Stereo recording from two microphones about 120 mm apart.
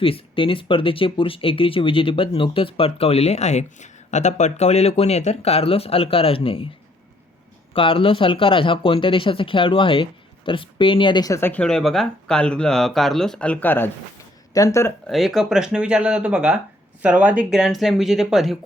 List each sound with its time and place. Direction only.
0.0 s speech: 50° left (ahead or behind)
7.7 s speech: 50° left (ahead or behind)
11.3 s speech: 20° left (ahead or behind)
11.6 s speech: 5° left (ahead or behind); by 14.9 s 25° left (ahead or behind)
15.0 s speech: centre (ahead or behind)